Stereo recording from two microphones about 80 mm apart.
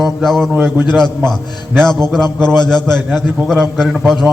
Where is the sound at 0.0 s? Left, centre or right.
Centre.